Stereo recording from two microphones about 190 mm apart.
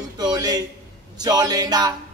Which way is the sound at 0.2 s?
20° right (ahead or behind).